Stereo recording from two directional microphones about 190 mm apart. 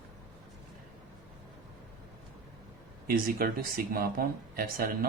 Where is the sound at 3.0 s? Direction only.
50° right (ahead or behind).